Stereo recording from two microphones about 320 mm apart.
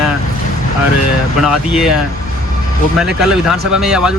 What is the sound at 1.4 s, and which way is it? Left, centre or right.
Speech, centre.